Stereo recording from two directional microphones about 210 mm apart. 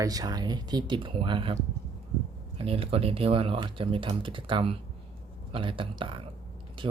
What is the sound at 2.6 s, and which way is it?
Speech, 25° right (ahead or behind).